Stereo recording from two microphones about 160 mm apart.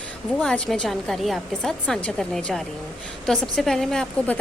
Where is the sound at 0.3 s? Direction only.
5° left (ahead or behind).